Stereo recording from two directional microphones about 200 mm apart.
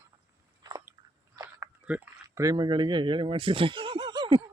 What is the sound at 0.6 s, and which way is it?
Biting, 20° right (ahead or behind).